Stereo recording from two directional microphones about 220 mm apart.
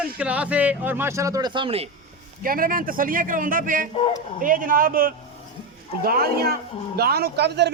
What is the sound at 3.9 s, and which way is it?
Speech, 25° left (ahead or behind).